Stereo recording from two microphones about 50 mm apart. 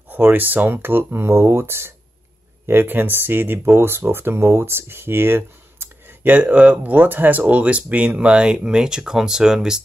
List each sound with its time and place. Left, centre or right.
0.1 s speech: right; by 9.8 s centre